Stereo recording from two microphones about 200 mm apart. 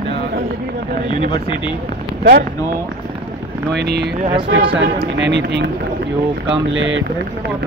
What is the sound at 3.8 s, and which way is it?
Speech, 55° right (ahead or behind).